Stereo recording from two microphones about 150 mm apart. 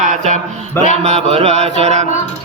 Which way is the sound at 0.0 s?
60° right (ahead or behind).